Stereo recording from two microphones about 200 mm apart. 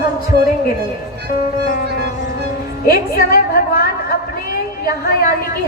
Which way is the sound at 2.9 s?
45° left (ahead or behind).